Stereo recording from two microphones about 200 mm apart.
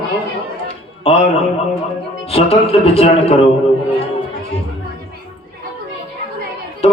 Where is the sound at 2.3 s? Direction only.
30° left (ahead or behind).